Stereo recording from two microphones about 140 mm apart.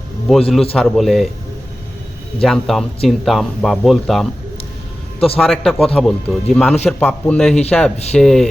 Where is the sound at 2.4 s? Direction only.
Centre (ahead or behind).